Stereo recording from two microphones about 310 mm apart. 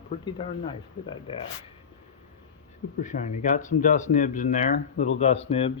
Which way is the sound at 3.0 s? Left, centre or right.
Left.